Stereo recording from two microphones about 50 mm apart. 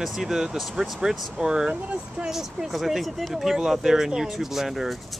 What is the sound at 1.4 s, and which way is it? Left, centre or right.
Speech, centre.